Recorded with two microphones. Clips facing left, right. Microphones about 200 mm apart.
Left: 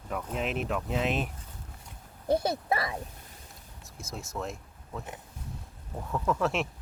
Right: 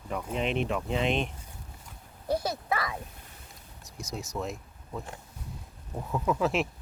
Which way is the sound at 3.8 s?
Centre (ahead or behind).